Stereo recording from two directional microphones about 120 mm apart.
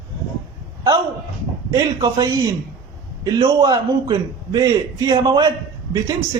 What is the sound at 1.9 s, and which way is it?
A man's voice, 35° right (ahead or behind).